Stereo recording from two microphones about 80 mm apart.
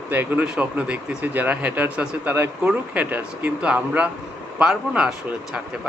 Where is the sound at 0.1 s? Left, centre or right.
Right.